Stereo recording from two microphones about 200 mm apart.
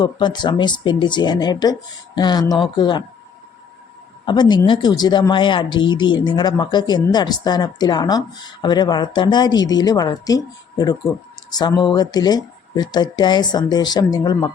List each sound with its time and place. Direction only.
0.0 s speech: 20° left (ahead or behind)
4.3 s speech: 20° left (ahead or behind)